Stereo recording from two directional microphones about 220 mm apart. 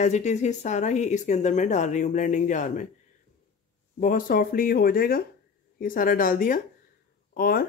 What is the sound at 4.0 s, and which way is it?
Speech, 35° left (ahead or behind).